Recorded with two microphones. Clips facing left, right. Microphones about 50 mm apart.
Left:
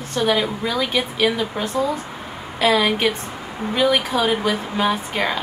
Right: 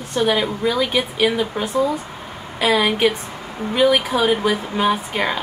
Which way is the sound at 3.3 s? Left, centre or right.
Centre.